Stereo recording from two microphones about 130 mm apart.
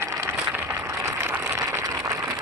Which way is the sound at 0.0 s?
20° right (ahead or behind).